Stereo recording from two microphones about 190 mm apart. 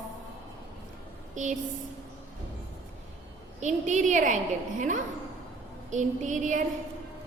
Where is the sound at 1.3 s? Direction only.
40° right (ahead or behind).